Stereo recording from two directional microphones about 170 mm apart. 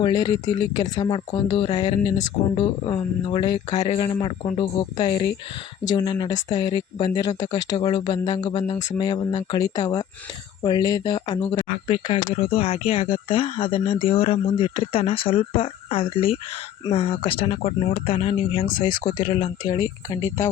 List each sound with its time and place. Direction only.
0.0 s speech: 25° left (ahead or behind)